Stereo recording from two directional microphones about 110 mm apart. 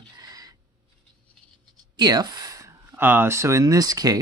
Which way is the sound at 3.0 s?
20° right (ahead or behind).